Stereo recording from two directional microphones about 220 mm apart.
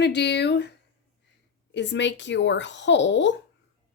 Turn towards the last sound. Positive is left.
turn(degrees=55)  # may be behind; listen again after turning